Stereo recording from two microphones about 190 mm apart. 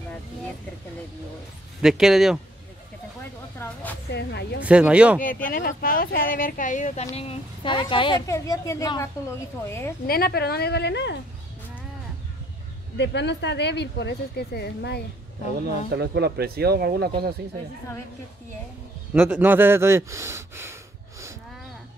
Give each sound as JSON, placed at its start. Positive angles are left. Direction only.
{"t": 1.8, "sound": "speech", "side_deg": -5}
{"t": 3.5, "sound": "speech", "side_deg": 10}
{"t": 4.1, "sound": "speech", "side_deg": 60}
{"t": 4.6, "sound": "speech", "side_deg": -5}
{"t": 5.2, "sound": "a woman's voice", "side_deg": 45}
{"t": 10.0, "sound": "speech", "side_deg": 50}
{"t": 12.9, "sound": "speech", "side_deg": 65}
{"t": 16.0, "sound": "speech", "side_deg": -55}
{"t": 19.1, "sound": "speech", "side_deg": -10}